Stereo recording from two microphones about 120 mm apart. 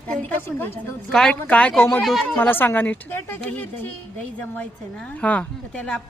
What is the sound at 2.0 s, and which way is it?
Speech, centre (ahead or behind).